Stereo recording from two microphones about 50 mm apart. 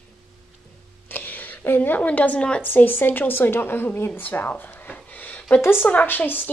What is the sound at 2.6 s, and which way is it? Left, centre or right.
Speech, left.